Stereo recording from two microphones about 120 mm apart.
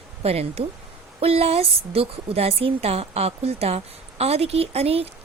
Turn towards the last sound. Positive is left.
turn(degrees=-55)  # may be behind; listen again after turning